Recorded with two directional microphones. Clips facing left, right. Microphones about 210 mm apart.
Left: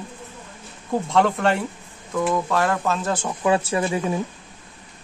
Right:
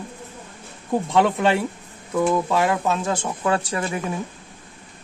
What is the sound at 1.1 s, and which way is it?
Speech, centre (ahead or behind).